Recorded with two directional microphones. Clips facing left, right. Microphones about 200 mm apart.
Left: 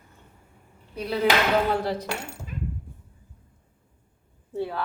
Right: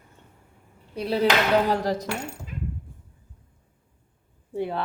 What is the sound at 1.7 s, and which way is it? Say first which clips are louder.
Cutlery: right 1 dB; 40° right (ahead or behind).